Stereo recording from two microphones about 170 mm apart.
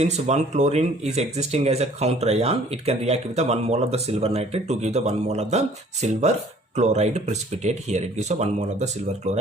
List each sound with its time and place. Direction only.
0.0 s speech: 40° right (ahead or behind)